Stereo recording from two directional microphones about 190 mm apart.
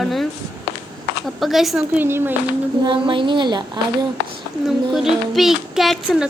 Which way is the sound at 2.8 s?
25° right (ahead or behind).